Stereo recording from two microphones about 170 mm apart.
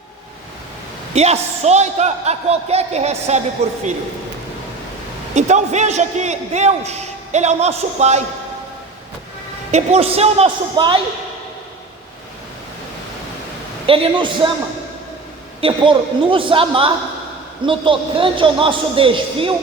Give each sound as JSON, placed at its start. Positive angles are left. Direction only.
{"t": 1.1, "sound": "a man's voice", "side_deg": -40}
{"t": 5.3, "sound": "a man's voice", "side_deg": -45}
{"t": 9.7, "sound": "a man's voice", "side_deg": -40}
{"t": 13.8, "sound": "a man's voice", "side_deg": -30}
{"t": 15.6, "sound": "a man's voice", "side_deg": -30}